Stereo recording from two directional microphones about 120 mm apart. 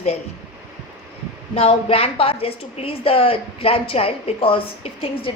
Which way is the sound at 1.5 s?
55° left (ahead or behind).